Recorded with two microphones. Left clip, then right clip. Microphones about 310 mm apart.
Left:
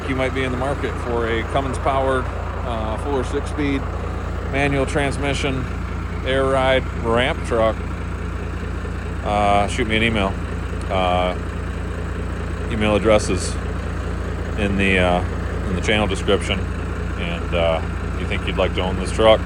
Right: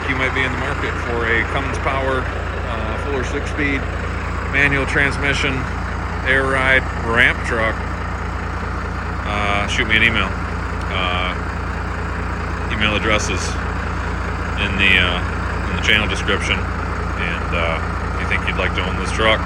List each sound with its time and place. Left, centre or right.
0.1 s speech: centre
3.2 s speech: centre
9.3 s speech: centre
12.7 s speech: centre
14.6 s speech: centre
17.2 s vehicle: centre
18.3 s speech: centre